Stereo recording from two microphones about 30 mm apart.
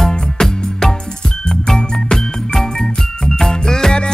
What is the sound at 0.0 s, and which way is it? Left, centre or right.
Music, centre.